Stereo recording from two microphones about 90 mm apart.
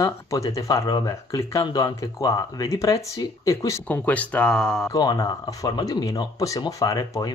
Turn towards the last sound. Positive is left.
turn(degrees=45)  # may be behind; listen again after turning